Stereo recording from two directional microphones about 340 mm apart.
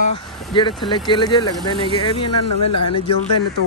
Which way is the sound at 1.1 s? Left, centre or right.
Centre.